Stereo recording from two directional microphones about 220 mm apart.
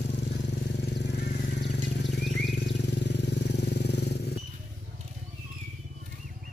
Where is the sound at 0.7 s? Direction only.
50° left (ahead or behind).